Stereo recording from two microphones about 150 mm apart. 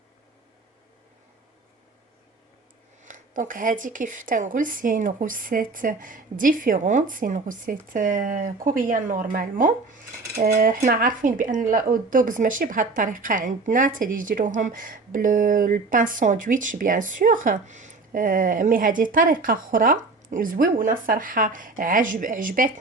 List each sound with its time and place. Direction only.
3.1 s speech: 60° right (ahead or behind)